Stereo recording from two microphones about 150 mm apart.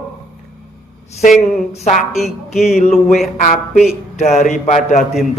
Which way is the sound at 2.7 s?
45° left (ahead or behind).